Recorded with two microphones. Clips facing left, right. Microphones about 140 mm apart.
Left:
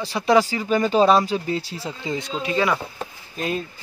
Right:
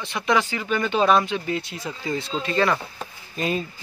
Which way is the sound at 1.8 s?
20° left (ahead or behind).